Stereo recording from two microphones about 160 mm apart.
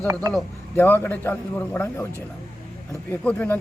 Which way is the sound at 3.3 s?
15° left (ahead or behind).